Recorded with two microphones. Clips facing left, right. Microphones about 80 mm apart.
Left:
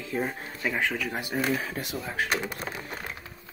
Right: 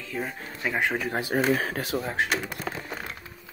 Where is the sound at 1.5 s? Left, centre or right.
Right.